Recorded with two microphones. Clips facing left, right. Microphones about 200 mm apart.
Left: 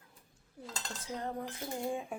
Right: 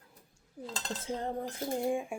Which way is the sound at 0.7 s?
30° right (ahead or behind).